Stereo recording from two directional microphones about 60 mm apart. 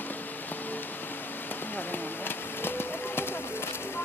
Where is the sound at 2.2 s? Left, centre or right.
Left.